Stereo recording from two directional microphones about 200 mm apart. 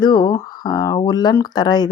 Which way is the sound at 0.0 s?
20° left (ahead or behind).